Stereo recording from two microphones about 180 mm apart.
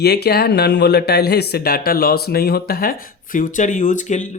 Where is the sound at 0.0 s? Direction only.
65° left (ahead or behind).